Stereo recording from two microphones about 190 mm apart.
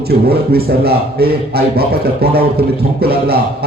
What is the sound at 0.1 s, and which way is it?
A man's voice, 55° right (ahead or behind).